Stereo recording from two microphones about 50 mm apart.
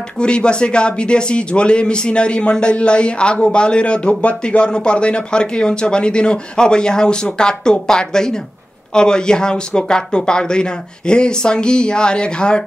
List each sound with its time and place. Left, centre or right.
0.2 s speech: centre